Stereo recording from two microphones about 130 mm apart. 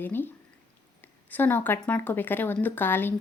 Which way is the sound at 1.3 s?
15° left (ahead or behind).